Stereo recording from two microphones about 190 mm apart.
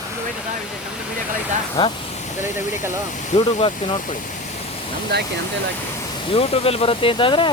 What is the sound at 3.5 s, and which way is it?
Speech, 30° left (ahead or behind).